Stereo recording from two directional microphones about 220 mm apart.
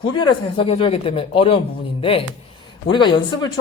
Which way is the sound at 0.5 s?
25° left (ahead or behind).